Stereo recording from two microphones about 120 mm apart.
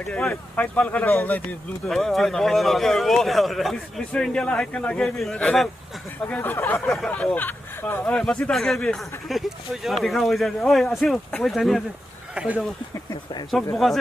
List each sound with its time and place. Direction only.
0.0 s speech: 10° left (ahead or behind)
1.9 s a man's voice: centre (ahead or behind)
6.2 s a man's voice: 15° left (ahead or behind)
12.4 s speech: 10° right (ahead or behind)
13.5 s a man's voice: centre (ahead or behind)